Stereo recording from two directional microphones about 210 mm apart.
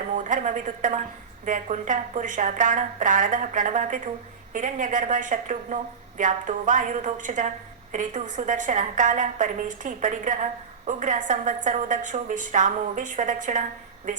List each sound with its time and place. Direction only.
0.1 s a woman's voice: 40° right (ahead or behind)